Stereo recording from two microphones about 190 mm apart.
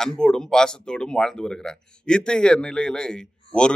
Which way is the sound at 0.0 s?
5° left (ahead or behind).